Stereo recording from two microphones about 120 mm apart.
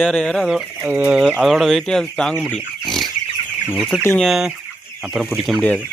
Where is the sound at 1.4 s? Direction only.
Centre (ahead or behind).